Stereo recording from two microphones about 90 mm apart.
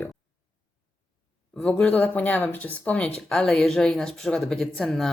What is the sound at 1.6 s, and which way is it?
Speech, 15° left (ahead or behind).